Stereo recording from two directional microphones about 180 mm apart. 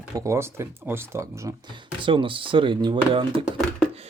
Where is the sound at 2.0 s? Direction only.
30° right (ahead or behind).